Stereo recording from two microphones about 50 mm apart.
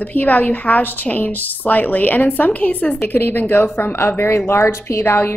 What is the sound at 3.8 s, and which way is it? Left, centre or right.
A woman's voice, left.